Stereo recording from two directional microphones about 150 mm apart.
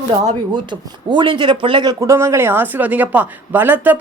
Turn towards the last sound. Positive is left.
turn(degrees=-10)  # may be behind; listen again after turning